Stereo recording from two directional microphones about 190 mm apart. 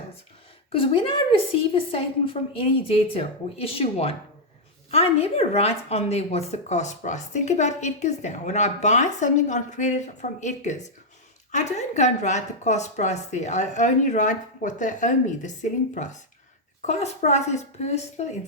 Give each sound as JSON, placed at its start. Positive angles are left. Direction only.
{"t": 0.7, "sound": "a woman's voice", "side_deg": 30}